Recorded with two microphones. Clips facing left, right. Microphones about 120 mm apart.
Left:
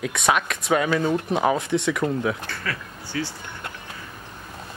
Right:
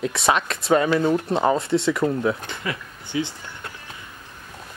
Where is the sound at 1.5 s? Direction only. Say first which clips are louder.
Right 2 dB; 20° left (ahead or behind).